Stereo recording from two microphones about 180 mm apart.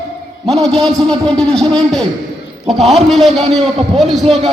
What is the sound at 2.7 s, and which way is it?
Speech, centre (ahead or behind).